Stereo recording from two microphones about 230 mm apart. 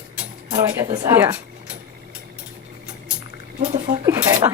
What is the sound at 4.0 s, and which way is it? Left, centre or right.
Speech, centre.